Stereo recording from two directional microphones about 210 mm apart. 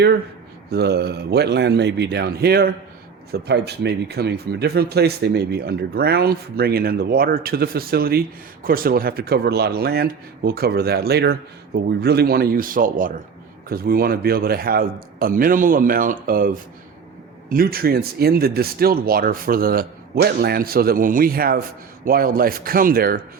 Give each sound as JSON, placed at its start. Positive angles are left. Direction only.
{"t": 0.7, "sound": "speech", "side_deg": -50}